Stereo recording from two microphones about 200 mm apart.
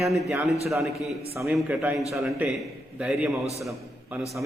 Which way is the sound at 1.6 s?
5° right (ahead or behind).